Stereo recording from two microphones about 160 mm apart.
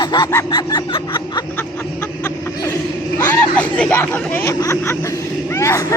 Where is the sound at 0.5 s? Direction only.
30° left (ahead or behind).